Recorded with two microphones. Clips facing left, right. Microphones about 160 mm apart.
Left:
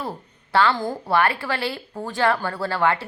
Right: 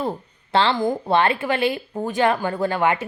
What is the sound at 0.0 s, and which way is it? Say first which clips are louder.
A woman's voice: right 5 dB; 20° right (ahead or behind).